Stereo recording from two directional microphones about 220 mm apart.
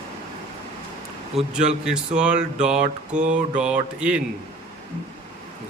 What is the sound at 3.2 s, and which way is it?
Mantra, 35° right (ahead or behind).